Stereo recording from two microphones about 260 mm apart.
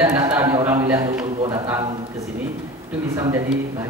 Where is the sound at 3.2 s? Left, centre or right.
Centre.